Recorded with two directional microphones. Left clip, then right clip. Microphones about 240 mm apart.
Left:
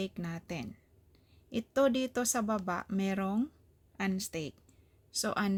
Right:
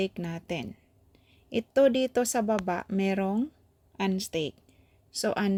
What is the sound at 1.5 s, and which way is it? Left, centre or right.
Speech, centre.